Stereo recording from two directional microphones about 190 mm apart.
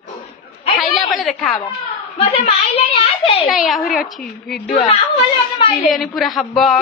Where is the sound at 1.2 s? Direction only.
Centre (ahead or behind).